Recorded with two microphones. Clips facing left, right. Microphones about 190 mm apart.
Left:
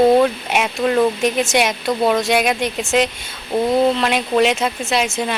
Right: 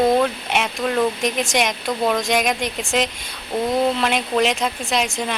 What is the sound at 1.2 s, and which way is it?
A woman's voice, 5° left (ahead or behind).